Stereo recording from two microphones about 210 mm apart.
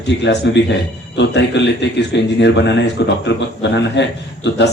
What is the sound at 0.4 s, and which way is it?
A man's voice, 55° left (ahead or behind).